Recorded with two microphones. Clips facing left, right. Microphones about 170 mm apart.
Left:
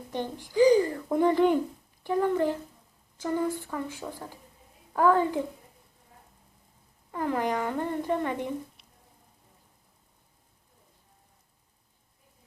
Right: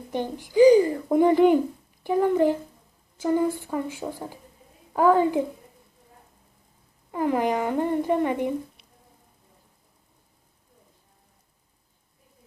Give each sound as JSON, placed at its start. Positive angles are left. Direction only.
{"t": 0.1, "sound": "a woman's voice", "side_deg": -10}
{"t": 7.1, "sound": "speech", "side_deg": -15}